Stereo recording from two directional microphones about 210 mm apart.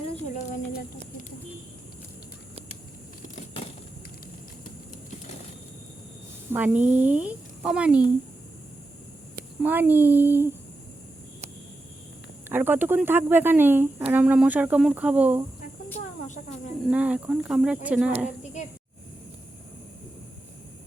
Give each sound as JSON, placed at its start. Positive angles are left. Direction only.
{"t": 0.0, "sound": "a sound", "side_deg": 35}
{"t": 6.5, "sound": "a woman's voice", "side_deg": -10}
{"t": 9.6, "sound": "speech", "side_deg": -10}
{"t": 12.5, "sound": "speech", "side_deg": -10}
{"t": 16.8, "sound": "speech", "side_deg": -5}